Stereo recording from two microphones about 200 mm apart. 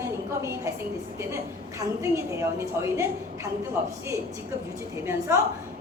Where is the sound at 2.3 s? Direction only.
15° right (ahead or behind).